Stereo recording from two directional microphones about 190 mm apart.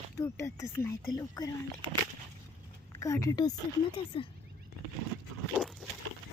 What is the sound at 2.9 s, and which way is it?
A woman's voice, 15° left (ahead or behind).